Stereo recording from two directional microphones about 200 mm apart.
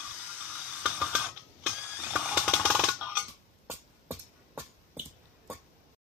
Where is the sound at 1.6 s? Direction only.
5° right (ahead or behind).